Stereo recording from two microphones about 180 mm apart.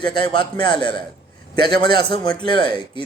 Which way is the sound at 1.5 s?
60° right (ahead or behind).